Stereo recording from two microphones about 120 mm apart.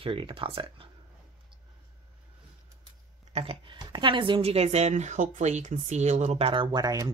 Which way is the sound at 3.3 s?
55° right (ahead or behind).